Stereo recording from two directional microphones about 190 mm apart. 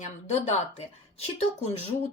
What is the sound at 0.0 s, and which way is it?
Speech, 35° left (ahead or behind).